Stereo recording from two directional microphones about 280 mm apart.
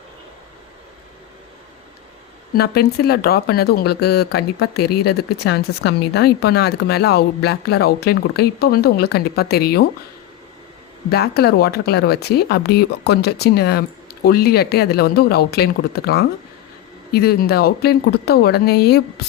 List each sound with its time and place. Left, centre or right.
2.5 s speech: left
11.1 s speech: left